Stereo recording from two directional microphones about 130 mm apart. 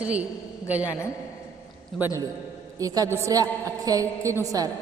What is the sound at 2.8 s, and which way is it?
A woman's voice, 25° right (ahead or behind).